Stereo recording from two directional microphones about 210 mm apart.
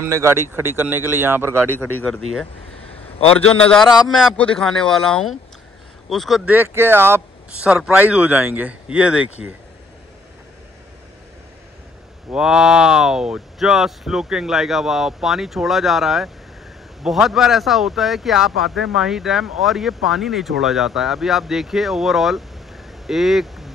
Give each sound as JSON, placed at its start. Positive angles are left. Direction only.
{"t": 0.1, "sound": "speech", "side_deg": -10}
{"t": 2.0, "sound": "speech", "side_deg": 0}
{"t": 3.2, "sound": "a man's voice", "side_deg": 25}
{"t": 3.5, "sound": "speech", "side_deg": 5}
{"t": 12.3, "sound": "speech", "side_deg": -5}